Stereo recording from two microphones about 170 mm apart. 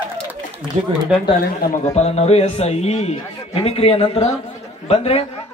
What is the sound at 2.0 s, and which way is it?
A man's voice, 40° left (ahead or behind).